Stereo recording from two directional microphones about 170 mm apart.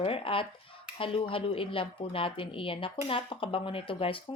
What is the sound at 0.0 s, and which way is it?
Speech, 35° left (ahead or behind).